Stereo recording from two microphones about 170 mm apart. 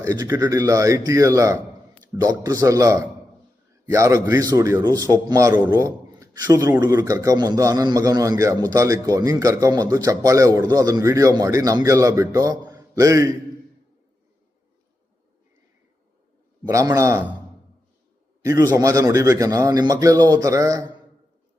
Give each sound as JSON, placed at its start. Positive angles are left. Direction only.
{"t": 0.0, "sound": "a man's voice", "side_deg": -20}
{"t": 16.6, "sound": "a man's voice", "side_deg": -20}
{"t": 18.4, "sound": "a man's voice", "side_deg": -20}